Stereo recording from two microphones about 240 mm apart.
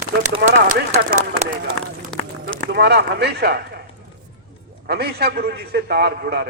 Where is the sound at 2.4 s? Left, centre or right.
Right.